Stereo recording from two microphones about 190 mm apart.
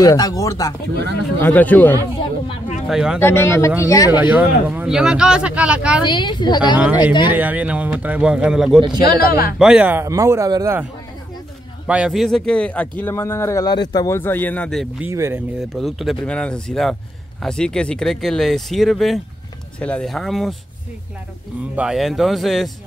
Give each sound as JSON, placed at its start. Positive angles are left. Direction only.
{"t": 0.0, "sound": "a man's voice", "side_deg": 20}
{"t": 2.9, "sound": "speech", "side_deg": -5}
{"t": 3.2, "sound": "a man's voice", "side_deg": 10}
{"t": 4.1, "sound": "speech", "side_deg": -10}
{"t": 6.0, "sound": "speech", "side_deg": 25}
{"t": 7.2, "sound": "speech", "side_deg": -10}
{"t": 9.0, "sound": "speech", "side_deg": 55}
{"t": 9.6, "sound": "speech", "side_deg": -5}
{"t": 11.9, "sound": "a man's voice", "side_deg": 0}
{"t": 15.0, "sound": "speech", "side_deg": -15}
{"t": 15.6, "sound": "speech", "side_deg": 0}
{"t": 21.7, "sound": "speech", "side_deg": 0}